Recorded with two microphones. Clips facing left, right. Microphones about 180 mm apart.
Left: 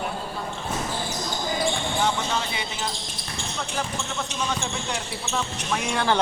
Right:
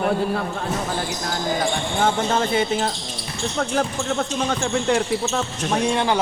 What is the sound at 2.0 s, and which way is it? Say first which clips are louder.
Speech: right 8 dB; 50° right (ahead or behind).